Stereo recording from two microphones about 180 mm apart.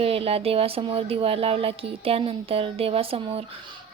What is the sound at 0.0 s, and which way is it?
Speech, 30° right (ahead or behind).